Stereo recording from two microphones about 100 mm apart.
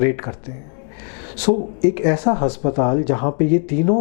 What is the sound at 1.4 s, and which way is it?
Speech, 15° left (ahead or behind).